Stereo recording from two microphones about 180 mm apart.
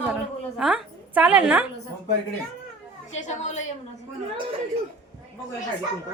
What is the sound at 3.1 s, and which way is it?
Speech, 40° left (ahead or behind).